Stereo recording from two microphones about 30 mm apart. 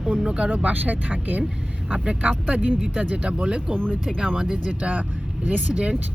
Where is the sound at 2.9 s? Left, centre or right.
Right.